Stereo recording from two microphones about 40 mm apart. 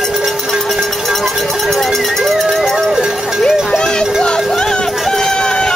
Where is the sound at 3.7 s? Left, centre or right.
Centre.